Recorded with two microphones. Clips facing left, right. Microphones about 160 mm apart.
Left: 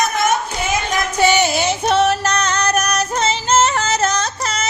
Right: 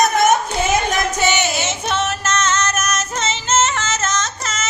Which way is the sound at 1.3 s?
35° left (ahead or behind).